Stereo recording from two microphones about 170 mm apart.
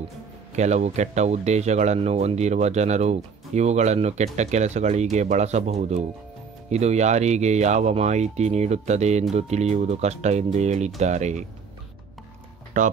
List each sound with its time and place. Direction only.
0.6 s speech: 40° right (ahead or behind)
12.7 s speech: 50° right (ahead or behind)